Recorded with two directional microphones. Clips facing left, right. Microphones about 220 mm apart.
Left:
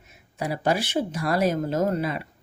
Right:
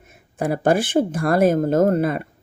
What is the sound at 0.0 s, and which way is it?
Speech, 50° right (ahead or behind).